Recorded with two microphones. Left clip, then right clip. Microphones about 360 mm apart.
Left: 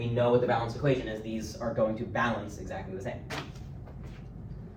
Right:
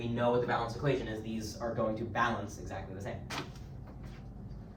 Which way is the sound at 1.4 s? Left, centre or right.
Centre.